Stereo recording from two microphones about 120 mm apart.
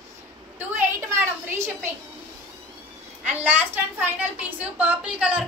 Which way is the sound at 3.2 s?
10° right (ahead or behind).